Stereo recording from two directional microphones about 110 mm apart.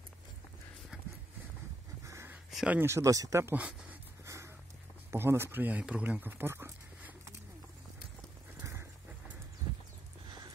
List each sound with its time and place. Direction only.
2.0 s a sound: 25° right (ahead or behind)
2.5 s speech: 10° right (ahead or behind)
2.8 s speech: 25° right (ahead or behind)
3.5 s speech: 15° right (ahead or behind)
4.3 s a sound: 25° right (ahead or behind)
5.1 s speech: 20° right (ahead or behind)